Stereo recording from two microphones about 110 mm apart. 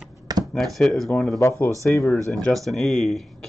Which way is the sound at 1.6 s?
25° left (ahead or behind).